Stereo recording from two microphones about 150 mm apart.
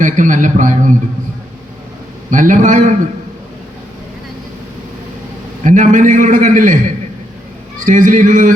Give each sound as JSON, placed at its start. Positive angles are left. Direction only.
{"t": 0.0, "sound": "a man's voice", "side_deg": -60}
{"t": 2.3, "sound": "a man's voice", "side_deg": -60}
{"t": 5.6, "sound": "a man's voice", "side_deg": -60}
{"t": 7.9, "sound": "a man's voice", "side_deg": -60}